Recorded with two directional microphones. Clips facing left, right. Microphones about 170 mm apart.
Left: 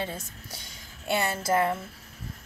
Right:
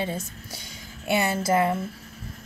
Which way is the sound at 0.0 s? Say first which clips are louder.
Right 4 dB; 15° right (ahead or behind).